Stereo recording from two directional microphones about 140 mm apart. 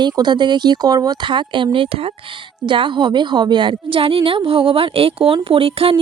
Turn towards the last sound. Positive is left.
turn(degrees=-40)  # may be behind; listen again after turning